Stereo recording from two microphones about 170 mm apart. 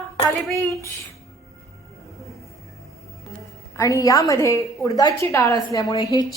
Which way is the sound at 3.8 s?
20° left (ahead or behind).